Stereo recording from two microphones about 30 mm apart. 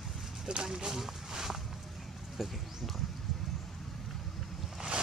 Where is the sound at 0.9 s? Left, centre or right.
Centre.